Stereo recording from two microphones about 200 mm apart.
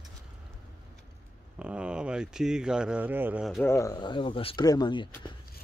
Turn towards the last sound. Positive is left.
turn(degrees=20)  # may be behind; listen again after turning